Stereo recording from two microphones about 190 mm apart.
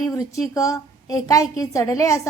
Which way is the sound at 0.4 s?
20° left (ahead or behind).